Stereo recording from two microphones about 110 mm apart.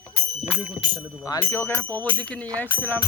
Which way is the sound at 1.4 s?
25° left (ahead or behind).